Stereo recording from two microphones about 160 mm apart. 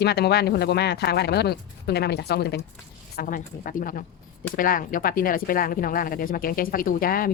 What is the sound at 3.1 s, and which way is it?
Speech, 60° left (ahead or behind).